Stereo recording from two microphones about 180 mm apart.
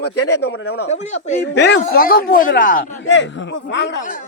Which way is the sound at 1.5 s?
70° left (ahead or behind).